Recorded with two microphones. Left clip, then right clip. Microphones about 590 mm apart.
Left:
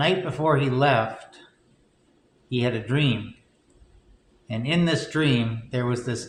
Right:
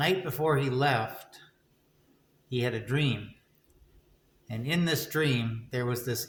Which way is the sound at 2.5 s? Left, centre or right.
Right.